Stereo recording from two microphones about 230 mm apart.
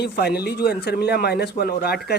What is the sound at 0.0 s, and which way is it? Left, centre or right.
A man's voice, left.